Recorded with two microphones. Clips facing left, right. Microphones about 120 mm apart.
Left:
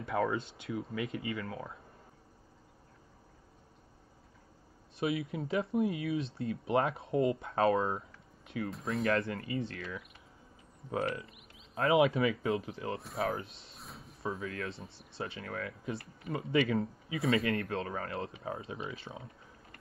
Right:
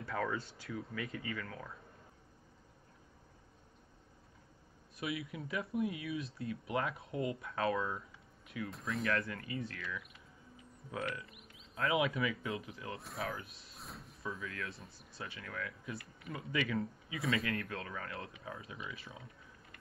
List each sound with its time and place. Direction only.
0.0 s speech: 20° left (ahead or behind)
4.9 s speech: 25° left (ahead or behind)
9.0 s speech: 30° left (ahead or behind)
13.7 s drawer open or close: centre (ahead or behind)
14.2 s speech: 35° left (ahead or behind)